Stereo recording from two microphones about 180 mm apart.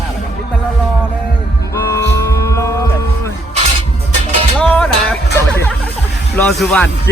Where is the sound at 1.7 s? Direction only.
15° left (ahead or behind).